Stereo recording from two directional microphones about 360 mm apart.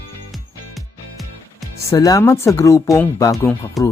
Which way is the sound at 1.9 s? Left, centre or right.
Centre.